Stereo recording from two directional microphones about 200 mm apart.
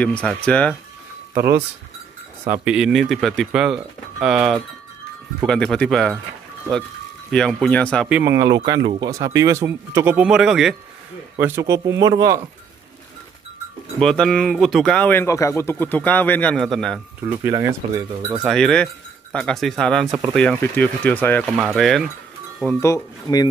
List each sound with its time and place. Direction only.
0.0 s speech: 5° left (ahead or behind)
1.3 s speech: 55° right (ahead or behind)
2.4 s speech: 10° right (ahead or behind)
7.2 s speech: 5° left (ahead or behind)
8.1 s speech: 10° right (ahead or behind)
11.3 s speech: 10° right (ahead or behind)
13.9 s speech: 5° left (ahead or behind)
17.2 s speech: 15° right (ahead or behind)
18.5 s speech: 5° left (ahead or behind)
21.5 s speech: 5° right (ahead or behind)
22.7 s speech: 15° left (ahead or behind)